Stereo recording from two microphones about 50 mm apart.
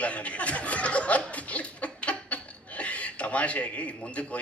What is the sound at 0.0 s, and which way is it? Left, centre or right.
Speech, left.